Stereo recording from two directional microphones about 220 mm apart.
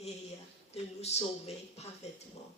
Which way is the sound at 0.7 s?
30° left (ahead or behind).